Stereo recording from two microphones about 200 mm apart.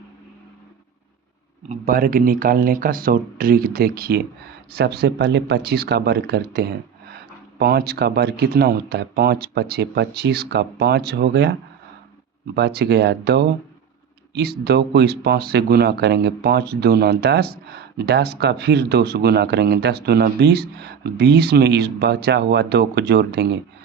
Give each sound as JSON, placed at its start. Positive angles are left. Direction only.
{"t": 1.7, "sound": "speech", "side_deg": -45}
{"t": 12.5, "sound": "speech", "side_deg": -55}